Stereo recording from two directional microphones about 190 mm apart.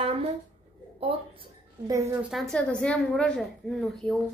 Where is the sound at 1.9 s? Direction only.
15° right (ahead or behind).